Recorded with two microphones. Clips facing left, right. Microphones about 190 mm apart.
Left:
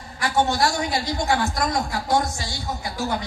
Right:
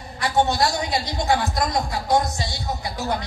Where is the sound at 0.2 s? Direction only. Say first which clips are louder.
Right 1 dB; 20° right (ahead or behind).